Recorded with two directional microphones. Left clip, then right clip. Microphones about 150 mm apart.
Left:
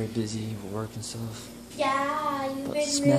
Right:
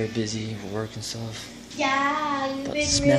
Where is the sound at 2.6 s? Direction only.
15° left (ahead or behind).